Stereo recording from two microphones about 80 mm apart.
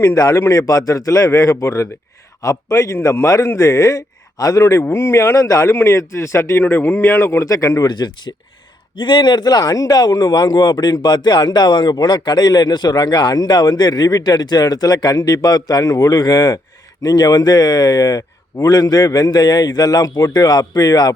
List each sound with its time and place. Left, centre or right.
0.0 s a man's voice: left
7.9 s speech: left
9.0 s a man's voice: left